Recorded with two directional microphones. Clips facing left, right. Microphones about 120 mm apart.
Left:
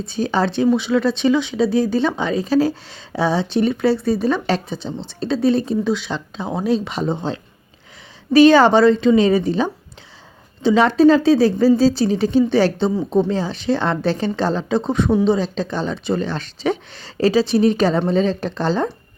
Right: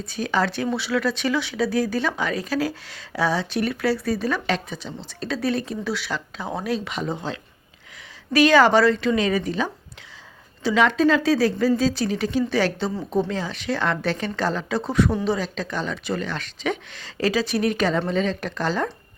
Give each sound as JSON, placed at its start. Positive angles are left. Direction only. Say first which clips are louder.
{"t": 0.0, "sound": "a woman's voice", "louder": "left 4 dB", "side_deg": 30}